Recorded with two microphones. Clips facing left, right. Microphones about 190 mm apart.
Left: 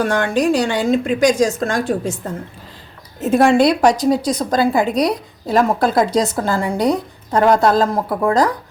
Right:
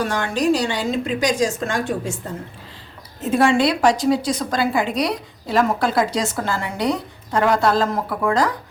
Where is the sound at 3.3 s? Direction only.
45° left (ahead or behind).